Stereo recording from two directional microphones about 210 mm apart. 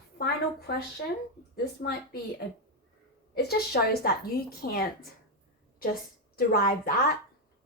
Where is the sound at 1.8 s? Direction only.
50° left (ahead or behind).